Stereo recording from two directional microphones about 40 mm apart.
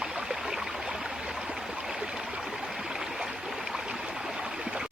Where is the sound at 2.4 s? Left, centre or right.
Centre.